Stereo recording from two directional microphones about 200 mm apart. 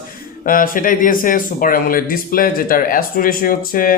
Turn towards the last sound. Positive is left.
turn(degrees=45)  # may be behind; listen again after turning